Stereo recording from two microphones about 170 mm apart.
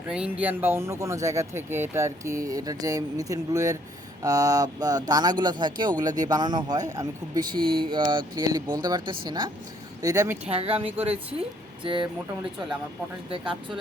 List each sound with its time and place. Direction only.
0.1 s speech: 5° right (ahead or behind)
10.5 s speech: 35° right (ahead or behind)
13.3 s speech: 30° right (ahead or behind)